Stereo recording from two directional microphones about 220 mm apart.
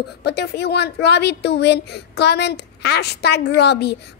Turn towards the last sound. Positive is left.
turn(degrees=50)  # may be behind; listen again after turning